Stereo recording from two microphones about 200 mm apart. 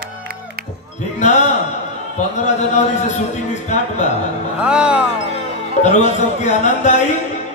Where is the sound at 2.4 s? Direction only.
35° left (ahead or behind).